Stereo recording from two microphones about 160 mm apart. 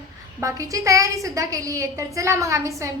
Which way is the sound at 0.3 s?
20° right (ahead or behind).